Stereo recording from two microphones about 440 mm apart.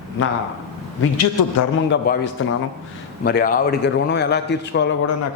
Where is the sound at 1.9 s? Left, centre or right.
Left.